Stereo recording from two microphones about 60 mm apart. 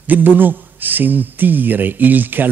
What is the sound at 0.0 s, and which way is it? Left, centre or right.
A man's voice, right.